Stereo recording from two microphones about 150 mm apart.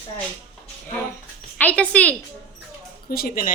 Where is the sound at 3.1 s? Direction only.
75° left (ahead or behind).